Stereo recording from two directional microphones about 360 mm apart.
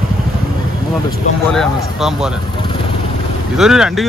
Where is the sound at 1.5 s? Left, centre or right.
Centre.